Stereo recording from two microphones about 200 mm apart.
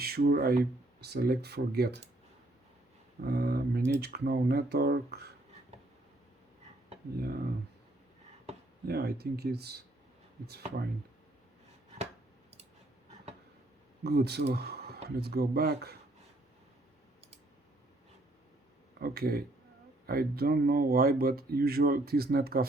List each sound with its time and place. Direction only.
0.0 s speech: 50° right (ahead or behind)
3.2 s speech: 50° right (ahead or behind)
7.2 s speech: 50° right (ahead or behind)
8.5 s a sound: 35° right (ahead or behind)
8.9 s speech: 55° right (ahead or behind)
14.0 s speech: 55° right (ahead or behind)
18.9 s speech: 50° right (ahead or behind)